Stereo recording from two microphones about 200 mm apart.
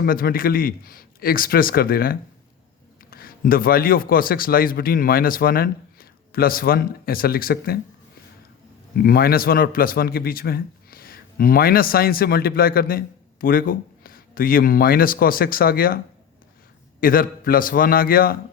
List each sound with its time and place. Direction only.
0.0 s a man's voice: 45° left (ahead or behind)
9.0 s a man's voice: 50° left (ahead or behind)
17.0 s a man's voice: 45° left (ahead or behind)